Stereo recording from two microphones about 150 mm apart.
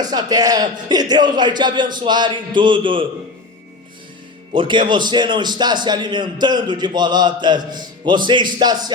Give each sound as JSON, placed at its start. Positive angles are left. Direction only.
{"t": 0.0, "sound": "a man's voice", "side_deg": -25}
{"t": 4.5, "sound": "a man's voice", "side_deg": -30}